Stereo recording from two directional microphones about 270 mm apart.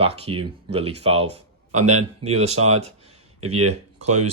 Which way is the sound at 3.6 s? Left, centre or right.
Right.